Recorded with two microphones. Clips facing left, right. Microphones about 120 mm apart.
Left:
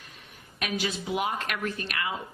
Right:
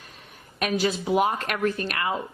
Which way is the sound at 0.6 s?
40° right (ahead or behind).